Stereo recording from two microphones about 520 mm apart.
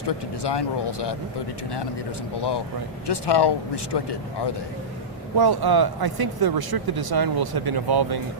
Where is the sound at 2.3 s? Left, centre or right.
Left.